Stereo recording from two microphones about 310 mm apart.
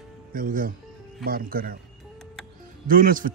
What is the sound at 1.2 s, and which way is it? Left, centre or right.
Speech, right.